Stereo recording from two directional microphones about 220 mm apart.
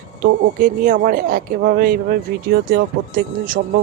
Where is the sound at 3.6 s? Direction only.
45° right (ahead or behind).